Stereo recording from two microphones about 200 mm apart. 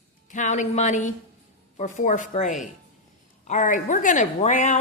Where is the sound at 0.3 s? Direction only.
40° left (ahead or behind).